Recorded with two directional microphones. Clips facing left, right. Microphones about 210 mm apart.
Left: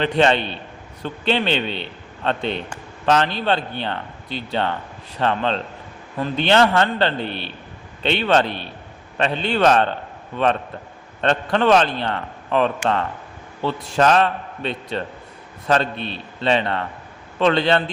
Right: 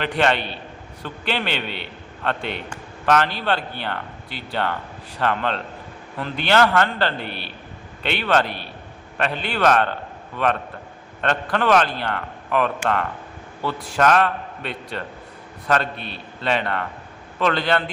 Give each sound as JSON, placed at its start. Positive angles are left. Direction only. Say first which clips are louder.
{"t": 0.0, "sound": "a man's voice", "louder": "left 3 dB", "side_deg": 20}
{"t": 7.3, "sound": "a man's voice", "louder": "left 4 dB", "side_deg": -5}
{"t": 8.0, "sound": "a man's voice", "louder": "left 3 dB", "side_deg": 25}